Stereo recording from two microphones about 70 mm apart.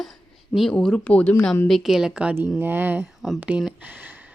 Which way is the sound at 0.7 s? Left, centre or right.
Centre.